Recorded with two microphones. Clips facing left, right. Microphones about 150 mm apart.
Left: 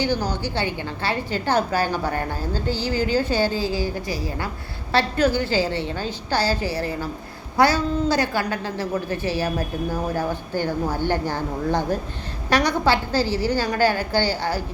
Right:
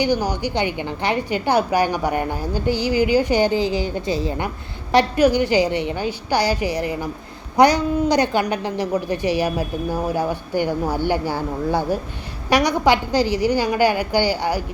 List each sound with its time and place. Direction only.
0.0 s a woman's voice: 15° right (ahead or behind)